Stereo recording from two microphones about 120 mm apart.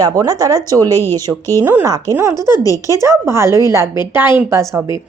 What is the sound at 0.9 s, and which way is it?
Speech, 20° left (ahead or behind).